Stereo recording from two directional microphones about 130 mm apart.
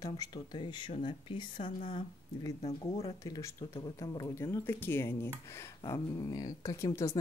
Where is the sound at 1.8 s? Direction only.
65° left (ahead or behind).